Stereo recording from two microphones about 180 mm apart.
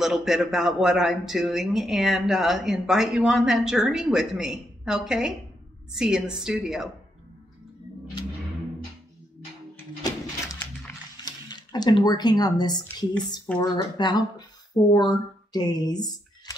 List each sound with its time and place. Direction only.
0.0 s speech: centre (ahead or behind)
10.0 s a sound: 15° left (ahead or behind)
12.7 s speech: 5° left (ahead or behind)
13.6 s a woman's voice: 25° left (ahead or behind)
15.5 s speech: 20° left (ahead or behind)